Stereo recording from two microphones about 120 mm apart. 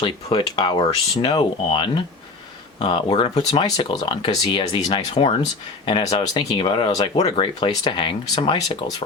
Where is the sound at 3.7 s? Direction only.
50° left (ahead or behind).